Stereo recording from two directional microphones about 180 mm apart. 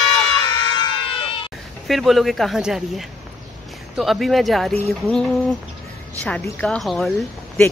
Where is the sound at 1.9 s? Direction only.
Centre (ahead or behind).